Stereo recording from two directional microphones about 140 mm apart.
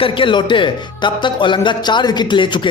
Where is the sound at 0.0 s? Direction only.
35° left (ahead or behind).